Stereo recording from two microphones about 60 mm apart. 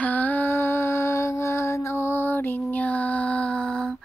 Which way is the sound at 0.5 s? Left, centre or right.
Left.